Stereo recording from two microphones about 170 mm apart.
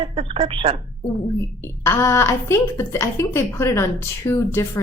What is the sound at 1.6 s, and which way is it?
Speech, 15° left (ahead or behind).